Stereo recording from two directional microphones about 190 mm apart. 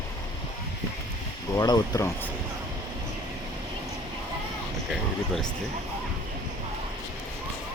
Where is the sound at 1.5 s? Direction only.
20° left (ahead or behind).